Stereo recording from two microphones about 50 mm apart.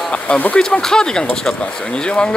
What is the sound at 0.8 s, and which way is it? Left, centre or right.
Speech, centre.